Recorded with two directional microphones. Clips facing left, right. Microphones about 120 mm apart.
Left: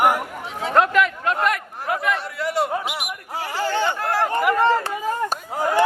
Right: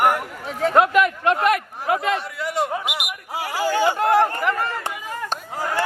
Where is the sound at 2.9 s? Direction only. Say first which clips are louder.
Even; 15° right (ahead or behind).